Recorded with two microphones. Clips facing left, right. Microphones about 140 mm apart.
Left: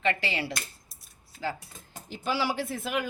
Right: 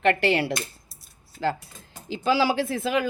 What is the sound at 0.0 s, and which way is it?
Speech, 60° right (ahead or behind).